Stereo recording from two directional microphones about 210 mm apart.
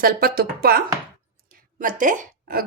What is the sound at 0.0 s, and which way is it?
Speech, 45° right (ahead or behind).